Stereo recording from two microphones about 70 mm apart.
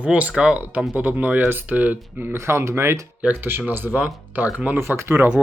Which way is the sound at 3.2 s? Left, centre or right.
Right.